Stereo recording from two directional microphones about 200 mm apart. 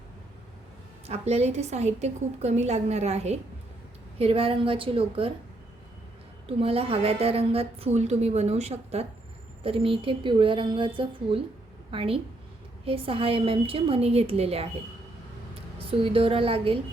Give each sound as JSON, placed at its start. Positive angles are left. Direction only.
{"t": 1.0, "sound": "a woman's voice", "side_deg": -30}
{"t": 6.6, "sound": "a woman's voice", "side_deg": -30}
{"t": 15.9, "sound": "a woman's voice", "side_deg": -25}